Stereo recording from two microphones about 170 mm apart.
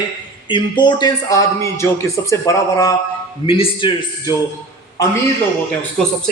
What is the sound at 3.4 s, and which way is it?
Speech, 35° left (ahead or behind).